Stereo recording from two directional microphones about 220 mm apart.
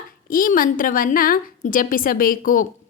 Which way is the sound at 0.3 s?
40° left (ahead or behind).